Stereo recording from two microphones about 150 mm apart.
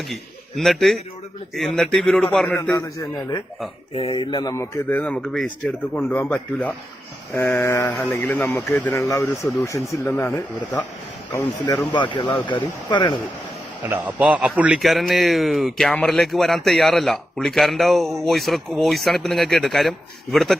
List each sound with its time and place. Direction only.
0.1 s a man's voice: centre (ahead or behind)
2.6 s a man's voice: 20° left (ahead or behind)
3.9 s speech: 35° left (ahead or behind)
4.5 s speech: 15° left (ahead or behind)
11.9 s speech: 30° left (ahead or behind)
13.8 s a man's voice: 10° right (ahead or behind)